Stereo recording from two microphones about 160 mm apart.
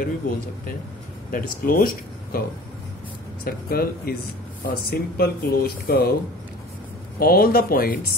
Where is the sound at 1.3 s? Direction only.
60° left (ahead or behind).